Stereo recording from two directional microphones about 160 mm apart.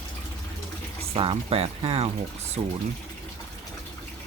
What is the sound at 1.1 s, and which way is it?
Speech, 35° right (ahead or behind).